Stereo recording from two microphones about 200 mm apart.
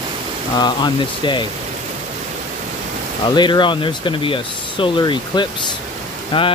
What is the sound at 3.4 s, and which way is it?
Speech, 25° left (ahead or behind).